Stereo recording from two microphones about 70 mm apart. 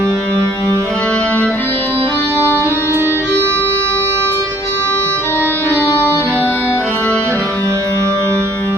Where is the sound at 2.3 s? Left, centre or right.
Right.